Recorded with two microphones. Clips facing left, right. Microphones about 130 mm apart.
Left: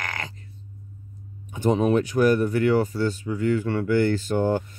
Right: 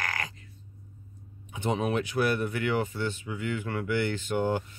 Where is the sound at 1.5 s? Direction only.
40° left (ahead or behind).